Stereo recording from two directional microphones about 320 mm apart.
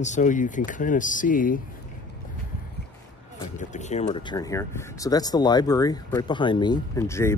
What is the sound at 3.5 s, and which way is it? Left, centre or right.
Speech, left.